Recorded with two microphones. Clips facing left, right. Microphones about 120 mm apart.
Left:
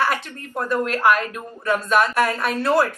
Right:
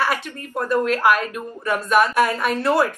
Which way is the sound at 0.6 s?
15° right (ahead or behind).